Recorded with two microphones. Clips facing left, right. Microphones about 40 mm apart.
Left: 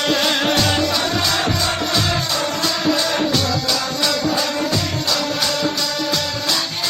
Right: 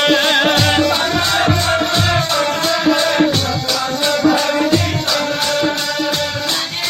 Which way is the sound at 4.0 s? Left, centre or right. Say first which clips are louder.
Right 8 dB; right.